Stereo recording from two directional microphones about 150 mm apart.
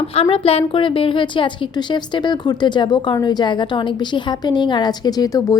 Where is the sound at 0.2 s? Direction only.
40° left (ahead or behind).